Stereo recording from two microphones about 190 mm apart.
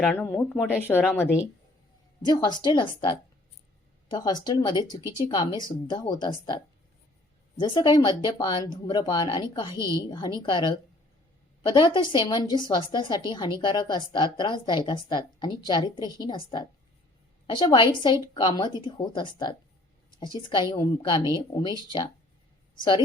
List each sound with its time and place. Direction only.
0.0 s a woman's voice: 5° left (ahead or behind); by 21.8 s 20° left (ahead or behind)
22.8 s a woman's voice: 25° left (ahead or behind)